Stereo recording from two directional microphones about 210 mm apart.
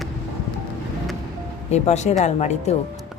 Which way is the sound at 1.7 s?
35° left (ahead or behind).